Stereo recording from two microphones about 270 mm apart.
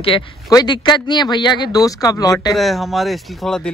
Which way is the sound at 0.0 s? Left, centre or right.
Centre.